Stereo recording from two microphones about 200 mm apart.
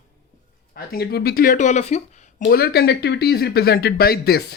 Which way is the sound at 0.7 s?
50° left (ahead or behind).